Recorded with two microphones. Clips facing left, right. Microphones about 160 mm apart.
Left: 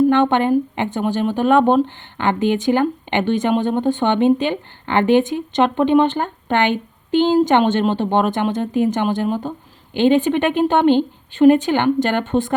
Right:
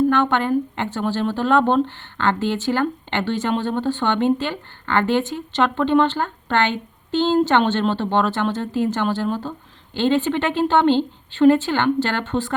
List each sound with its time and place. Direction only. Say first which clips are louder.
0.1 s speech: left 4 dB; 20° left (ahead or behind)